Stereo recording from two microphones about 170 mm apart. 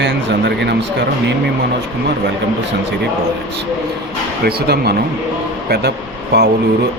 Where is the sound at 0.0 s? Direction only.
90° right.